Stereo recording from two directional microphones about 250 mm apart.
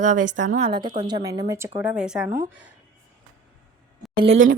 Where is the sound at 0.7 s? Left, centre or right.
Centre.